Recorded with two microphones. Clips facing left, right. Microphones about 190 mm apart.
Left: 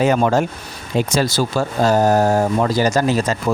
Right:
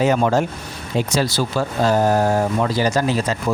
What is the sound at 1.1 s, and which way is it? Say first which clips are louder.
Speech: left 1 dB; 45° left (ahead or behind).